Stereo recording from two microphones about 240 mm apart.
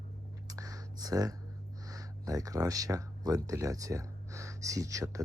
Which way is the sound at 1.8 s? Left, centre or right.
Centre.